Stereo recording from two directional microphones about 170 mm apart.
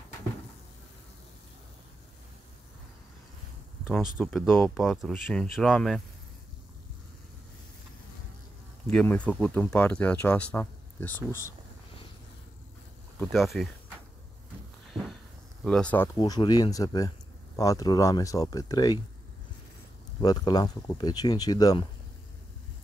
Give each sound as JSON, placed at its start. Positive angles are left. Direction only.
{"t": 3.8, "sound": "speech", "side_deg": -5}
{"t": 8.9, "sound": "speech", "side_deg": 10}
{"t": 13.2, "sound": "speech", "side_deg": 0}
{"t": 15.6, "sound": "speech", "side_deg": 5}
{"t": 16.2, "sound": "speech", "side_deg": 25}
{"t": 20.2, "sound": "speech", "side_deg": 25}